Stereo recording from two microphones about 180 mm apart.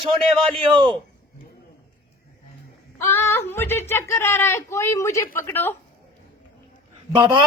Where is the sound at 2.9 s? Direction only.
15° left (ahead or behind).